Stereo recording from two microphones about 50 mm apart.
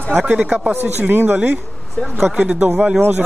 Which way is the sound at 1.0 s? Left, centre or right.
Right.